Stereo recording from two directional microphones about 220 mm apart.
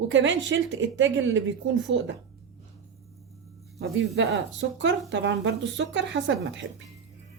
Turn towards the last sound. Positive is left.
turn(degrees=-55)  # may be behind; listen again after turning